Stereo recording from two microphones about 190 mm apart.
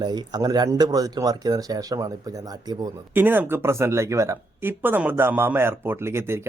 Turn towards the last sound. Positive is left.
turn(degrees=-15)  # may be behind; listen again after turning